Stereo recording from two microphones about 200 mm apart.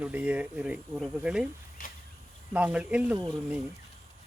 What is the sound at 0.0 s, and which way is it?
Speech, 5° right (ahead or behind).